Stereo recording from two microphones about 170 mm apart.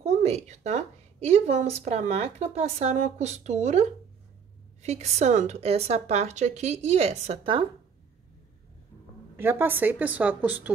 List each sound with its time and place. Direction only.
0.0 s a woman's voice: 40° right (ahead or behind)
4.8 s a woman's voice: 40° right (ahead or behind)
9.4 s a woman's voice: 15° right (ahead or behind)